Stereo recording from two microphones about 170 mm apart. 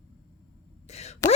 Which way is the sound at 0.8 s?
40° left (ahead or behind).